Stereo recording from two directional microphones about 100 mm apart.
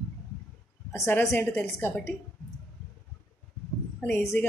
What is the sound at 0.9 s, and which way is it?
Speech, 25° left (ahead or behind).